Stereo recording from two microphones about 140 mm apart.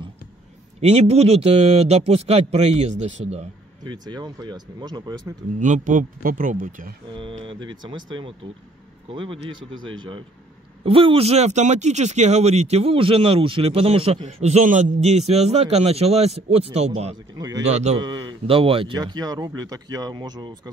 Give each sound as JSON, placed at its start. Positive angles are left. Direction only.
{"t": 0.7, "sound": "speech", "side_deg": -50}
{"t": 3.8, "sound": "speech", "side_deg": -30}
{"t": 5.6, "sound": "speech", "side_deg": -65}
{"t": 7.4, "sound": "speech", "side_deg": -35}
{"t": 10.8, "sound": "speech", "side_deg": -40}
{"t": 17.9, "sound": "speech", "side_deg": -30}
{"t": 18.9, "sound": "speech", "side_deg": -30}